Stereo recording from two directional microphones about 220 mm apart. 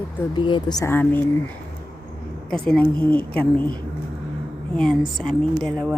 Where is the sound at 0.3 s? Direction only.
20° left (ahead or behind).